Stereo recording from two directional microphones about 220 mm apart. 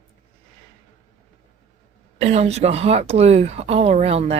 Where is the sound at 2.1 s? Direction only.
30° right (ahead or behind).